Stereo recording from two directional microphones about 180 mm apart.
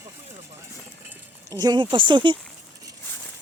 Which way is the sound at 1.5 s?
20° right (ahead or behind).